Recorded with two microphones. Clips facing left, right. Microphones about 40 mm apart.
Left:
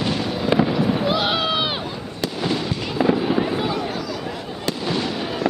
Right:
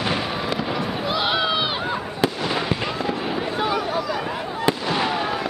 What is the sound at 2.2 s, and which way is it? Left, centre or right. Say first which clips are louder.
Fireworks: even; right.